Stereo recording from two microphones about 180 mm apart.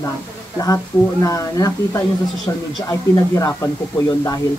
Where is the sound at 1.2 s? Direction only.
20° left (ahead or behind).